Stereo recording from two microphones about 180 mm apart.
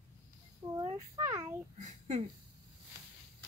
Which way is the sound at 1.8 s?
40° right (ahead or behind).